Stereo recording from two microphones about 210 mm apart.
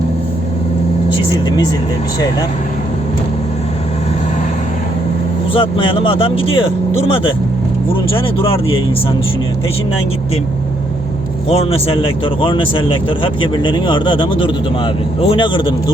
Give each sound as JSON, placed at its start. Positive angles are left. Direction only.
{"t": 1.1, "sound": "speech", "side_deg": 20}
{"t": 5.5, "sound": "a man's voice", "side_deg": 25}
{"t": 11.4, "sound": "a man's voice", "side_deg": 30}